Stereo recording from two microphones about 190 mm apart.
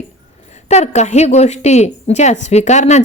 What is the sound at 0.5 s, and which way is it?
A woman's voice, 35° left (ahead or behind).